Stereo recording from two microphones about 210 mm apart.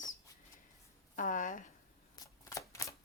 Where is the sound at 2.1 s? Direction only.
15° left (ahead or behind).